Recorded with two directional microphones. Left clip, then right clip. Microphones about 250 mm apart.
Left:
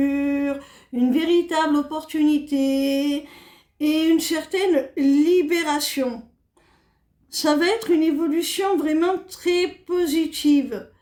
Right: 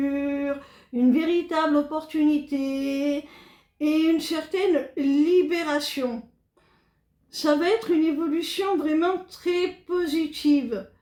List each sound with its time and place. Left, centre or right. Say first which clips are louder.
0.0 s a sound: left 4 dB; left
0.9 s speech: left 3 dB; left
7.4 s speech: left 2 dB; left